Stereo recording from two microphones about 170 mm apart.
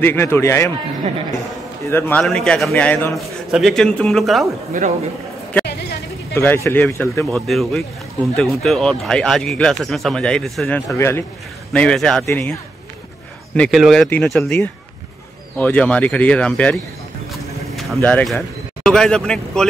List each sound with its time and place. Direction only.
0.0 s speech: 15° left (ahead or behind)
1.9 s speech: 15° left (ahead or behind)
4.7 s a man's voice: 50° right (ahead or behind)
6.3 s speech: 15° left (ahead or behind)
7.2 s speech: centre (ahead or behind)
11.0 s speech: 15° left (ahead or behind)
13.6 s speech: centre (ahead or behind)